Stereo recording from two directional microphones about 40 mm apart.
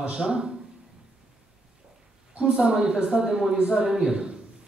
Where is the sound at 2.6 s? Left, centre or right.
Centre.